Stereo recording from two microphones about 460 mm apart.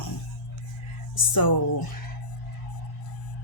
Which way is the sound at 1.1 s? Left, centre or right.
Left.